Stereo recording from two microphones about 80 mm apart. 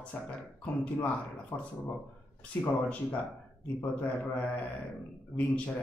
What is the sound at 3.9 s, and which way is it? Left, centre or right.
Speech, centre.